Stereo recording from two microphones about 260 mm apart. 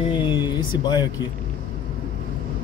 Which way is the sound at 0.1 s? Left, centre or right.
Centre.